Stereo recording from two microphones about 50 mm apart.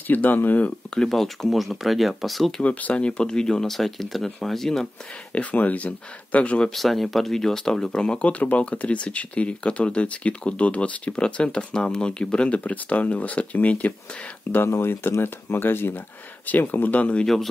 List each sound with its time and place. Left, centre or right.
0.1 s speech: left
0.8 s speech: centre
2.6 s speech: left; by 4.8 s centre
5.3 s speech: left
6.7 s speech: centre
8.3 s speech: left
14.5 s speech: left
17.0 s speech: left